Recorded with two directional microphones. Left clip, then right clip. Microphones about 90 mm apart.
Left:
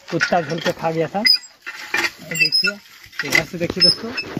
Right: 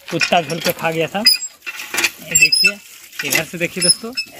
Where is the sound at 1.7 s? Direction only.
15° left (ahead or behind).